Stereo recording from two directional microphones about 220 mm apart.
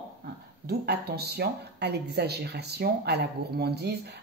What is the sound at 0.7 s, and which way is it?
Speech, 45° right (ahead or behind).